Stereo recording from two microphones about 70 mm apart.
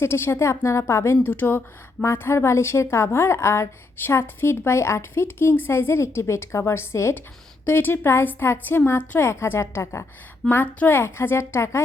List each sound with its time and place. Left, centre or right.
0.0 s a woman's voice: left
1.1 s a woman's voice: left